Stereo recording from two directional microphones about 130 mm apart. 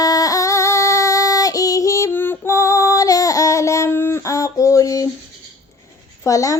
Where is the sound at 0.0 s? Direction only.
30° left (ahead or behind).